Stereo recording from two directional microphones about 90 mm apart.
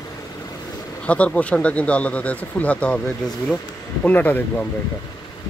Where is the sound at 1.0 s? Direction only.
15° left (ahead or behind).